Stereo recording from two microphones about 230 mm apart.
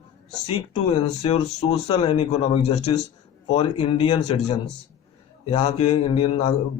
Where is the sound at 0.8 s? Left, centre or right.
Left.